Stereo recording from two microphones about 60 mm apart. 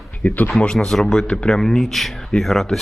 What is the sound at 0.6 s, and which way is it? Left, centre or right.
Speech, centre.